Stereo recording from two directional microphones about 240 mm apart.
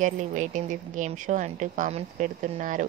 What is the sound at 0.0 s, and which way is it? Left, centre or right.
A woman's voice, right.